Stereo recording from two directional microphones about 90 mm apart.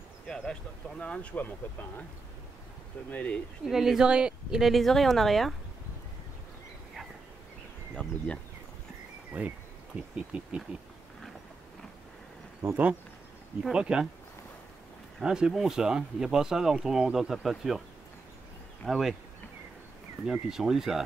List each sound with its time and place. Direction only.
0.3 s speech: 10° left (ahead or behind)
3.1 s speech: 15° left (ahead or behind)
3.6 s speech: 5° right (ahead or behind)
7.9 s speech: 10° left (ahead or behind)
9.3 s speech: 15° right (ahead or behind)
13.7 s speech: 10° right (ahead or behind)
15.1 s speech: 5° right (ahead or behind)
18.9 s speech: centre (ahead or behind)
20.2 s speech: 5° right (ahead or behind)